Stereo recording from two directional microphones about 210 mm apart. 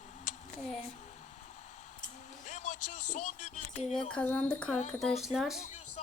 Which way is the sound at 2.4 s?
35° left (ahead or behind).